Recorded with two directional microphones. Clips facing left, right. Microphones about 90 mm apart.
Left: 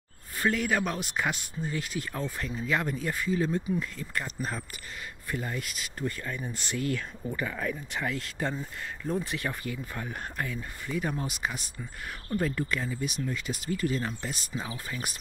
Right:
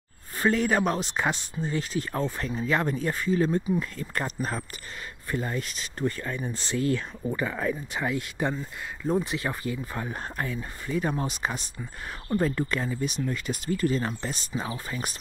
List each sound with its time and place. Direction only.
0.4 s speech: 35° right (ahead or behind)
6.4 s speech: 30° right (ahead or behind)
7.9 s speech: 20° right (ahead or behind); by 15.1 s 40° right (ahead or behind)